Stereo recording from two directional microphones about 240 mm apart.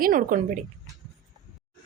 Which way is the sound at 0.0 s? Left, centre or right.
Right.